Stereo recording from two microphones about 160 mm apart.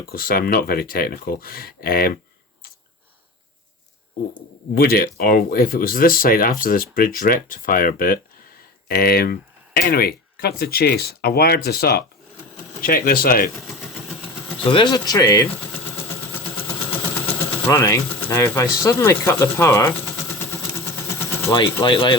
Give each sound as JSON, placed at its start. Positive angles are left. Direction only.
{"t": 0.1, "sound": "speech", "side_deg": 65}
{"t": 4.7, "sound": "speech", "side_deg": 70}
{"t": 12.8, "sound": "speech", "side_deg": 65}
{"t": 14.6, "sound": "speech", "side_deg": 30}
{"t": 17.7, "sound": "speech", "side_deg": 20}
{"t": 21.5, "sound": "speech", "side_deg": 30}